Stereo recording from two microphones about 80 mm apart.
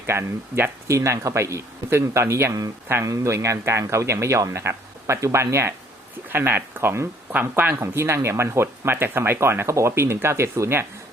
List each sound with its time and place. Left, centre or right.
0.0 s speech: right
0.9 s speech: right